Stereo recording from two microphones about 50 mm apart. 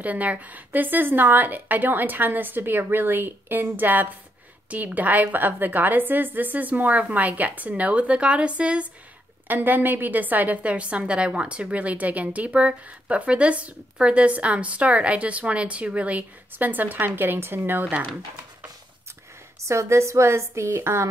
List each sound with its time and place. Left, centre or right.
0.0 s a woman's voice: right
9.5 s a woman's voice: right
19.6 s a woman's voice: right